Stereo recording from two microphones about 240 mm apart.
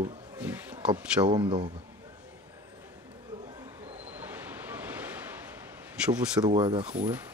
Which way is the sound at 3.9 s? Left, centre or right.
Centre.